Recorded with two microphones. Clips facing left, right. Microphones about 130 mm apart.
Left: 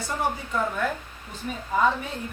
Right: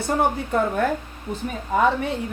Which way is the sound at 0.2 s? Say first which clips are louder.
Right 4 dB; 55° right (ahead or behind).